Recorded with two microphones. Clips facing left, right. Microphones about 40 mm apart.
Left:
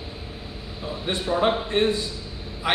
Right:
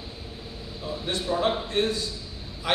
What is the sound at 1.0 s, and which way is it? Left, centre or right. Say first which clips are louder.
A man's voice: left 3 dB; left.